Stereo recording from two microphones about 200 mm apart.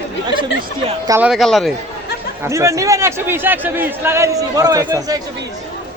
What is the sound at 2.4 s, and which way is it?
A man's voice, 15° right (ahead or behind).